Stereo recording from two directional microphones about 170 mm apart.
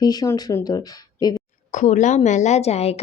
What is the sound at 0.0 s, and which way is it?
Speech, 25° left (ahead or behind).